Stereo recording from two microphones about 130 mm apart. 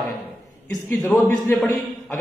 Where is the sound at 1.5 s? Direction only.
Centre (ahead or behind).